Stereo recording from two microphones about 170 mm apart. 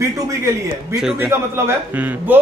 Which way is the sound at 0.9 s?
5° right (ahead or behind).